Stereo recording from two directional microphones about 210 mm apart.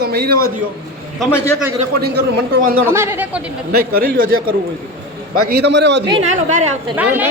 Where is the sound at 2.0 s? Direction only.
50° right (ahead or behind).